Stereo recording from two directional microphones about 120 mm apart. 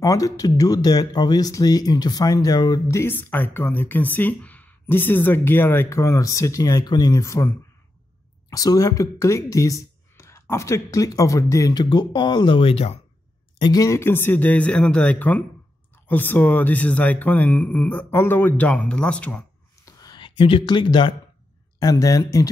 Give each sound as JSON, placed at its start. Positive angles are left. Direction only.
{"t": 0.0, "sound": "speech", "side_deg": 30}
{"t": 3.0, "sound": "speech", "side_deg": 15}
{"t": 13.6, "sound": "speech", "side_deg": 30}
{"t": 19.8, "sound": "a sound", "side_deg": 35}
{"t": 21.7, "sound": "speech", "side_deg": 30}